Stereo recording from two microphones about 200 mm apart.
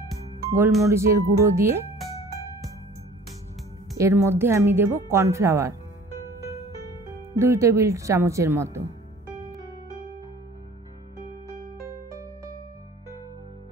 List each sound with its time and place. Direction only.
0.7 s speech: 15° right (ahead or behind)
4.0 s speech: 15° right (ahead or behind)
7.3 s speech: 15° right (ahead or behind)
11.8 s music: 15° right (ahead or behind)